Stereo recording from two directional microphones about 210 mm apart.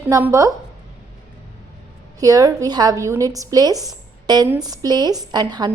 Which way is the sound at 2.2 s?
15° right (ahead or behind).